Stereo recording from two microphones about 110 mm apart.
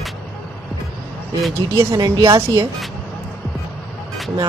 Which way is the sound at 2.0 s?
40° right (ahead or behind).